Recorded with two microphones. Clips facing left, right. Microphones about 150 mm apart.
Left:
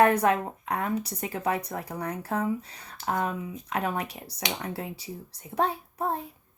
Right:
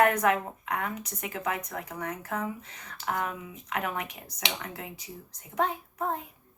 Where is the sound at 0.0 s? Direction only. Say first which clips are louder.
Left 2 dB; 30° left (ahead or behind).